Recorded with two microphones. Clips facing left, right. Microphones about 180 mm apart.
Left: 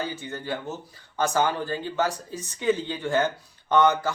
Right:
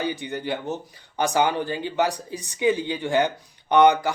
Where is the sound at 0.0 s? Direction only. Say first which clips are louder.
Right 4 dB; 15° right (ahead or behind).